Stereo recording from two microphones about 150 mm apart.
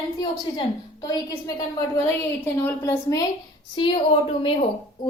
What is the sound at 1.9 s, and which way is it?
A woman's voice, 15° left (ahead or behind).